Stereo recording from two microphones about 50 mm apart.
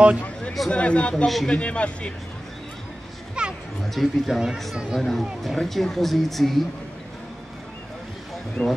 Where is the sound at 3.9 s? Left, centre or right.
Centre.